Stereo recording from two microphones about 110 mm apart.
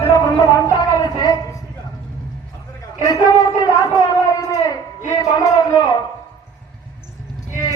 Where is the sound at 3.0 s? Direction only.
35° left (ahead or behind).